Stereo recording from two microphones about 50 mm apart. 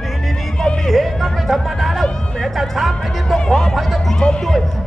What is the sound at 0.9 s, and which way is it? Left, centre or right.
Speech, centre.